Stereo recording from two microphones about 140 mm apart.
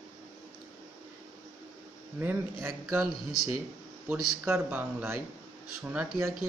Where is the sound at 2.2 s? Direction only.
15° right (ahead or behind).